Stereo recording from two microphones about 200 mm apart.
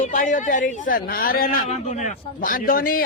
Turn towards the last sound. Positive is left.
turn(degrees=45)  # may be behind; listen again after turning